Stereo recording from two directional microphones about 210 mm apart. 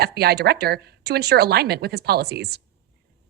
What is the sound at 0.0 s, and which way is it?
A woman's voice, 50° right (ahead or behind).